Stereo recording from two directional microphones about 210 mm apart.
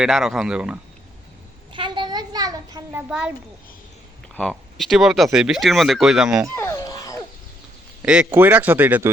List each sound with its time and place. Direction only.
0.0 s speech: centre (ahead or behind)
1.7 s a sound: 25° right (ahead or behind)
3.1 s speech: 5° right (ahead or behind)
4.4 s speech: centre (ahead or behind)
6.6 s a sound: 15° left (ahead or behind)
8.0 s speech: 5° right (ahead or behind)